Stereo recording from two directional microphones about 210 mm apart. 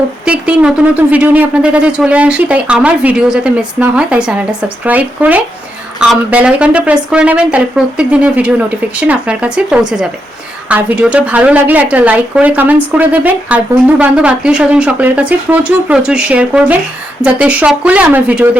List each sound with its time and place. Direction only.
0.3 s a woman's voice: 5° right (ahead or behind)